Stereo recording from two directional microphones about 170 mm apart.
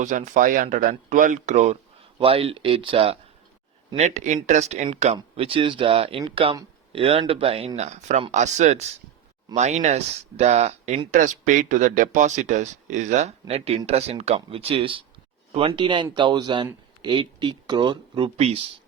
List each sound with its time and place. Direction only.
0.0 s speech: 45° right (ahead or behind)
5.1 s speech: 30° right (ahead or behind)